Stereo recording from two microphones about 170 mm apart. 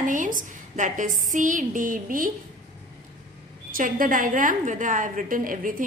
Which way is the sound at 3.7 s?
55° right (ahead or behind).